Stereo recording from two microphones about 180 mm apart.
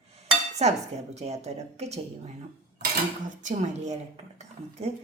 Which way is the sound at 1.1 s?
40° right (ahead or behind).